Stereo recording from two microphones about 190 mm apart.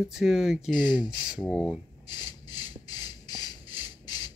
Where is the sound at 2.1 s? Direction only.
20° left (ahead or behind).